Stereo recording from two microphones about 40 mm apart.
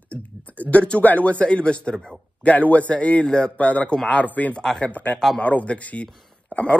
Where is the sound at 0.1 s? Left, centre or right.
Left.